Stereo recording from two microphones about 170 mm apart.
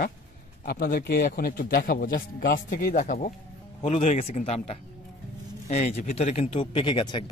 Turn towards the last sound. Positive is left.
turn(degrees=30)  # may be behind; listen again after turning